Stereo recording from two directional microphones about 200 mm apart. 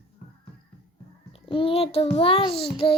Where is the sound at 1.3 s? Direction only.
25° left (ahead or behind).